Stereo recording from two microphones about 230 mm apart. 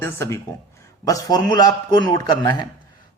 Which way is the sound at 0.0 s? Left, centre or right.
Centre.